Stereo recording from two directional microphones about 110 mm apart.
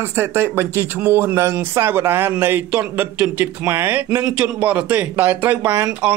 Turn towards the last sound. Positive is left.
turn(degrees=-20)  # may be behind; listen again after turning